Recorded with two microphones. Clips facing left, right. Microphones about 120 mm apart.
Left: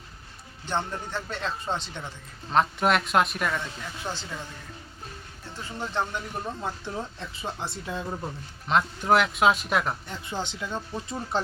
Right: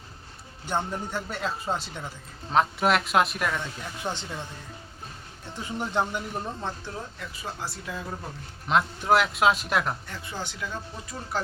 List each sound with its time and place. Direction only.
0.6 s a man's voice: 10° right (ahead or behind)
4.0 s speech: 20° right (ahead or behind)
5.5 s a man's voice: 15° right (ahead or behind)
6.4 s speech: 5° left (ahead or behind)
6.8 s speech: 20° left (ahead or behind)
8.6 s speech: centre (ahead or behind)
10.1 s speech: 20° left (ahead or behind)